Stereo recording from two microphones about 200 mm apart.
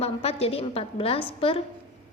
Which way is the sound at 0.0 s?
30° left (ahead or behind).